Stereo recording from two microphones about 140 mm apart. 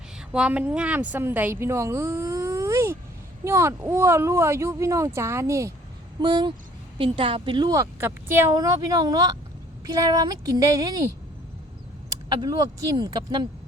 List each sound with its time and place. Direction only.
0.3 s speech: 5° right (ahead or behind)
6.1 s a woman's voice: 30° right (ahead or behind)
12.4 s a woman's voice: 30° right (ahead or behind)